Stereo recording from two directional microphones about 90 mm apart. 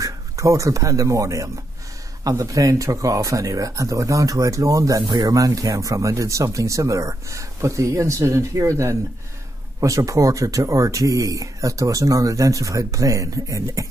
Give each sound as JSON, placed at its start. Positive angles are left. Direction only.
{"t": 0.0, "sound": "speech", "side_deg": -35}
{"t": 5.0, "sound": "speech", "side_deg": -55}
{"t": 5.3, "sound": "speech", "side_deg": -40}